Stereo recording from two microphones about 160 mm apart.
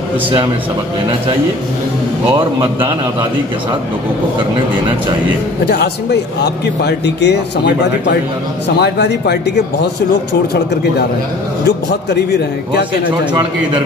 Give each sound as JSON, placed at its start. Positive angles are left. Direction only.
{"t": 2.6, "sound": "a man's voice", "side_deg": -30}
{"t": 5.7, "sound": "speech", "side_deg": 90}